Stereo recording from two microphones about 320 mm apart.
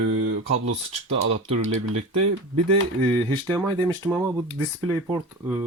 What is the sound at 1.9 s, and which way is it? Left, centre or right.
Speech, right.